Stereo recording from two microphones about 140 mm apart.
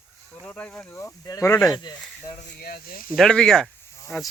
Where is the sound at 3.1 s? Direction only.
5° left (ahead or behind).